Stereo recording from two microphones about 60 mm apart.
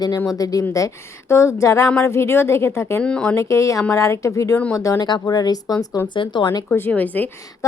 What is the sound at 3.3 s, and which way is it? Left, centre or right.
A woman's voice, left.